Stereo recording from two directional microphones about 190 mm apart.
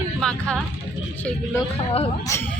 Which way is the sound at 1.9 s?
30° left (ahead or behind).